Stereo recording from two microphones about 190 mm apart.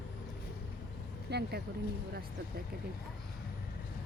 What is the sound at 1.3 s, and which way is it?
Speech, 60° right (ahead or behind).